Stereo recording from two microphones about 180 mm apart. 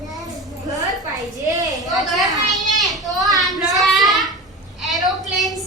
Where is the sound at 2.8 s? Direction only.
Centre (ahead or behind).